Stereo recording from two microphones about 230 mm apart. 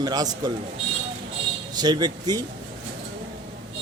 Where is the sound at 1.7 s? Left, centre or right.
Centre.